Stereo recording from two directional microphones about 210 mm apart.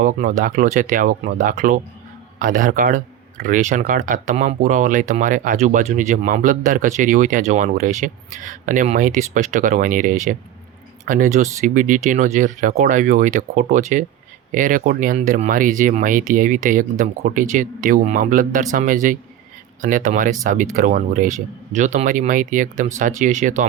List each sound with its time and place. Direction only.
0.0 s speech: 40° right (ahead or behind)